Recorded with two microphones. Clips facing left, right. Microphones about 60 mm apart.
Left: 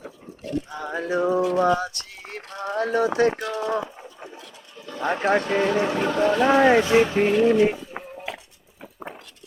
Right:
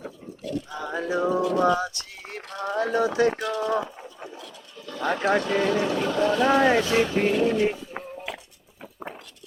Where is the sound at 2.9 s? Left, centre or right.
Left.